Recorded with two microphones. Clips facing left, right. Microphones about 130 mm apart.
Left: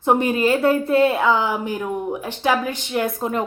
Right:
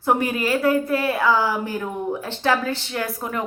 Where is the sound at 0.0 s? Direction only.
20° left (ahead or behind).